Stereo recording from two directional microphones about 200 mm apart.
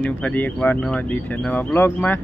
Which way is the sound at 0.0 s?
10° left (ahead or behind).